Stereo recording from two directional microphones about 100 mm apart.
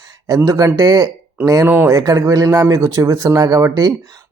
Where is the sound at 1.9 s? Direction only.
35° right (ahead or behind).